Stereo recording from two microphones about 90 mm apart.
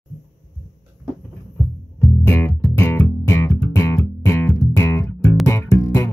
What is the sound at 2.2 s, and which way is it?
Music, 25° left (ahead or behind).